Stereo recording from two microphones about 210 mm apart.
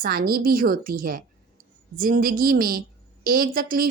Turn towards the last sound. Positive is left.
turn(degrees=-45)  # may be behind; listen again after turning